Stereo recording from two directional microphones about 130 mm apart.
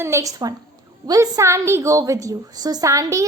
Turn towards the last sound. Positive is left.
turn(degrees=-25)  # may be behind; listen again after turning